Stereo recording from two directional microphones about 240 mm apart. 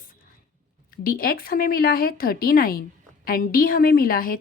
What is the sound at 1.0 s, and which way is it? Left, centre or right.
A woman's voice, left.